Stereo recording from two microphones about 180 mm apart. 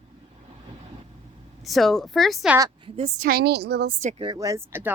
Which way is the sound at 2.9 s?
35° right (ahead or behind).